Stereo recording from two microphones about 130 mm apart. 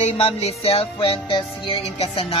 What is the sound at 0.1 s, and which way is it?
Music, 50° left (ahead or behind).